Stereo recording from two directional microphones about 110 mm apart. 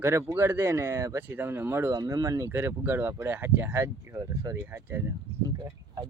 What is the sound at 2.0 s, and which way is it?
Speech, 35° right (ahead or behind).